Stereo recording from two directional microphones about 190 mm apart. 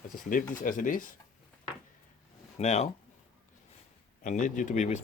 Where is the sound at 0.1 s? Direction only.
45° left (ahead or behind).